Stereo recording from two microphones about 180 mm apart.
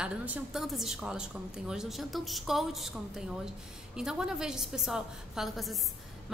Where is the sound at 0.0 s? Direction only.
5° right (ahead or behind).